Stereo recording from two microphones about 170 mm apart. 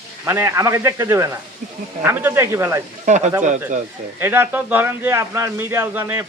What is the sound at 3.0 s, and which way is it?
Speech, 45° right (ahead or behind).